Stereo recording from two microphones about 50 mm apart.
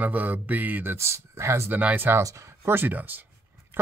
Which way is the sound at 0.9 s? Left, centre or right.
Right.